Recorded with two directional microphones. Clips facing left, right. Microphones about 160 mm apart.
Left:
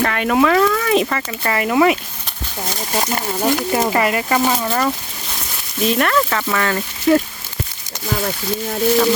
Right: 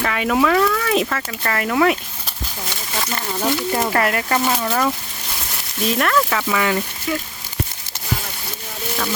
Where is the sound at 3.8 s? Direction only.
5° left (ahead or behind).